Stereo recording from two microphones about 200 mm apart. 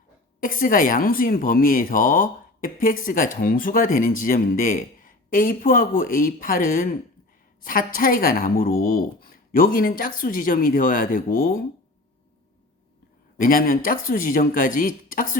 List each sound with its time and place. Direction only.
0.3 s speech: 45° left (ahead or behind)
13.4 s speech: 45° left (ahead or behind)